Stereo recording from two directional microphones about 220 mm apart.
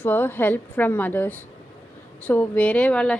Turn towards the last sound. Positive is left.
turn(degrees=5)  # may be behind; listen again after turning